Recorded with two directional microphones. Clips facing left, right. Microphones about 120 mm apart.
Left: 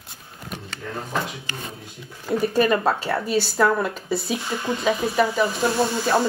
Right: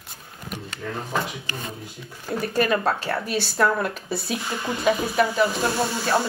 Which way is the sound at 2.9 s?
Centre (ahead or behind).